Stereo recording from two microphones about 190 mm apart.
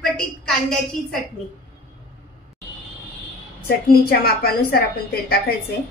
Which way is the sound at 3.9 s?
50° left (ahead or behind).